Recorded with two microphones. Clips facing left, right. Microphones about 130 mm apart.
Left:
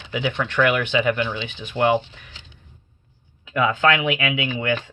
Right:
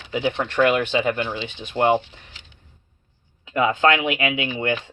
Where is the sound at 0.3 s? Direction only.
35° right (ahead or behind).